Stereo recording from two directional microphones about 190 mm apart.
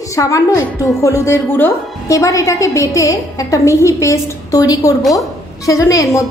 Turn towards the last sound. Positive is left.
turn(degrees=15)  # may be behind; listen again after turning